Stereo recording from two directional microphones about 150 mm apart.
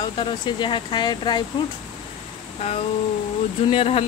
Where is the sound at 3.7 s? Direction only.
45° left (ahead or behind).